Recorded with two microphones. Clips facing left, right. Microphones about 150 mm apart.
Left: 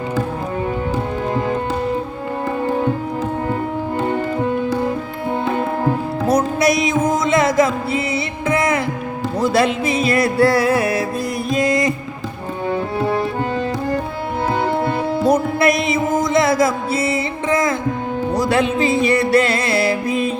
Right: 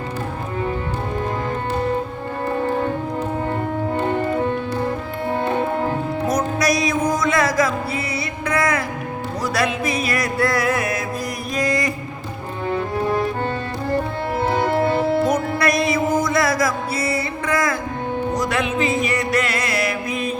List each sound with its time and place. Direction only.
6.2 s music: 25° left (ahead or behind)
15.2 s music: 25° left (ahead or behind)